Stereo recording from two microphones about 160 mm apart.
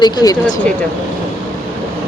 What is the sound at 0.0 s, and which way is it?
Speech, 25° left (ahead or behind).